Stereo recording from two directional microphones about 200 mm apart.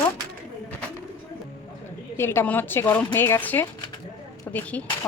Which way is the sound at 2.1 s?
10° left (ahead or behind).